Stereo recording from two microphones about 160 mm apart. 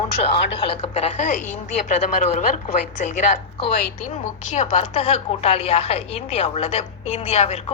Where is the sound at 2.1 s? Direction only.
45° left (ahead or behind).